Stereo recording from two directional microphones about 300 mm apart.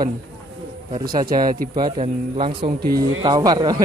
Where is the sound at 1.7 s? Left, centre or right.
Centre.